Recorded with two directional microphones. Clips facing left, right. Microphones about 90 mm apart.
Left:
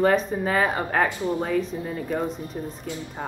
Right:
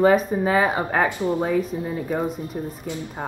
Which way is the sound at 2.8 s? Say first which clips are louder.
Right 2 dB; 20° right (ahead or behind).